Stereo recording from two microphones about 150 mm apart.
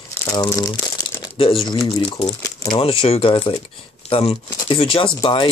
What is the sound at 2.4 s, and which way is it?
Speech, 20° left (ahead or behind).